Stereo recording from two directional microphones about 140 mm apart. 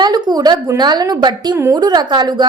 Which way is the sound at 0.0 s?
30° right (ahead or behind).